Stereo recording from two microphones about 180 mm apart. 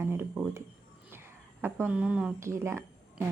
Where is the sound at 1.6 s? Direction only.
10° right (ahead or behind).